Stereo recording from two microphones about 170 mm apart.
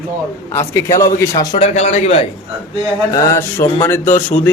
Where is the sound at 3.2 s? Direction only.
15° left (ahead or behind).